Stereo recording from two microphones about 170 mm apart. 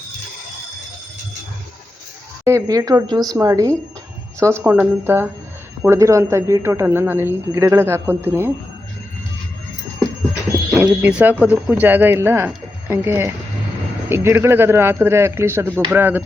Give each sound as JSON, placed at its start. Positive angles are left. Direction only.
{"t": 2.4, "sound": "speech", "side_deg": -20}
{"t": 11.0, "sound": "speech", "side_deg": -10}